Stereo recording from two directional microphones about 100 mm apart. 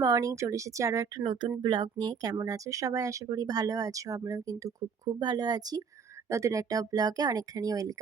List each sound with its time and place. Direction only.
0.0 s speech: 35° right (ahead or behind)
1.2 s speech: 50° right (ahead or behind)
6.2 s speech: 30° right (ahead or behind)